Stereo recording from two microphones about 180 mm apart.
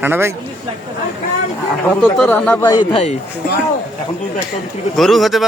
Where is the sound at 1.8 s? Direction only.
5° left (ahead or behind).